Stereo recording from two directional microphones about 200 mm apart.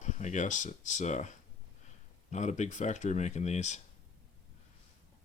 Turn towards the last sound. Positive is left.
turn(degrees=35)  # may be behind; listen again after turning